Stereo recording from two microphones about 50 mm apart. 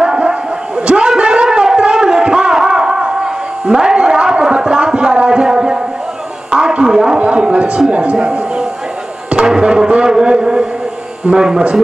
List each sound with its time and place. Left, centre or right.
0.0 s a sound: right
7.9 s speech: right
9.3 s music: centre
11.2 s a man's voice: centre